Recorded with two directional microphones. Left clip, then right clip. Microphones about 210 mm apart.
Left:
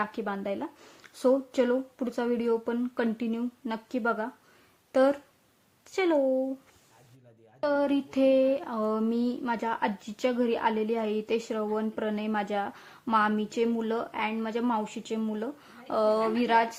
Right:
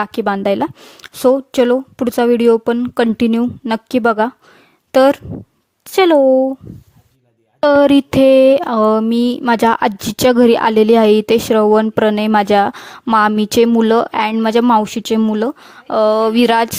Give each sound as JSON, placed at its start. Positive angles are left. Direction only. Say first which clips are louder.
{"t": 0.0, "sound": "speech", "louder": "right 15 dB", "side_deg": -50}
{"t": 7.6, "sound": "speech", "louder": "right 17 dB", "side_deg": -45}